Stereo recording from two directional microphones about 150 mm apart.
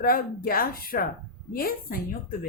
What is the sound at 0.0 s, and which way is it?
A woman's voice, 75° left (ahead or behind).